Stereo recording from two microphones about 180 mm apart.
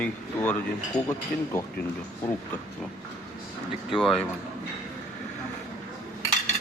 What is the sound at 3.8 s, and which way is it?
Speech, centre (ahead or behind).